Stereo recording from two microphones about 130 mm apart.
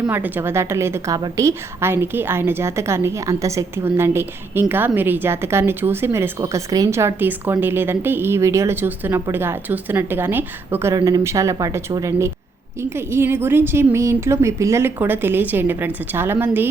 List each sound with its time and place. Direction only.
0.1 s a woman's voice: 15° right (ahead or behind)